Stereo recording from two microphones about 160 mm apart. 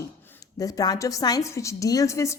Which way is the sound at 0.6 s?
20° left (ahead or behind).